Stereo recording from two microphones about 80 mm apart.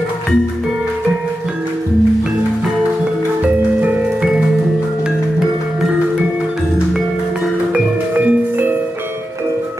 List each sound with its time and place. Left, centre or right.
3.8 s music: centre
7.7 s music: centre